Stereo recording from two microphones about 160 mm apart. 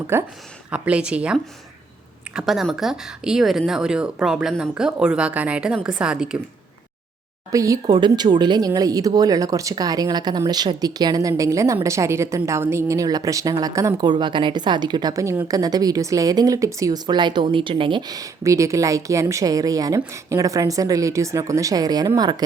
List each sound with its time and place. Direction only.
0.1 s speech: 15° right (ahead or behind)
7.5 s speech: 20° right (ahead or behind)